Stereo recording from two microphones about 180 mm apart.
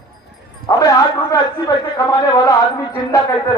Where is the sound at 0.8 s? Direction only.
20° left (ahead or behind).